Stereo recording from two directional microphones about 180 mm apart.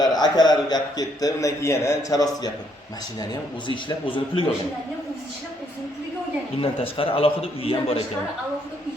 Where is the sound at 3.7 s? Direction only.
25° left (ahead or behind).